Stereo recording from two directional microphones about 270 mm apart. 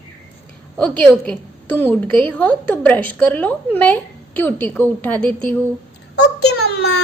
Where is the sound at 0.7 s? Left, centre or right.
Centre.